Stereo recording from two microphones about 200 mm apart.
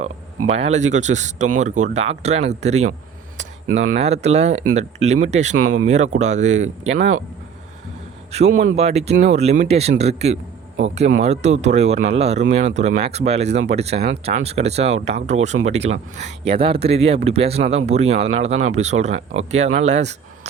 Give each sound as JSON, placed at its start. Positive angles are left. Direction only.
{"t": 0.4, "sound": "speech", "side_deg": -30}
{"t": 3.7, "sound": "speech", "side_deg": -80}
{"t": 4.0, "sound": "speech", "side_deg": -35}
{"t": 5.6, "sound": "speech", "side_deg": -90}
{"t": 5.9, "sound": "speech", "side_deg": -35}
{"t": 8.3, "sound": "speech", "side_deg": -35}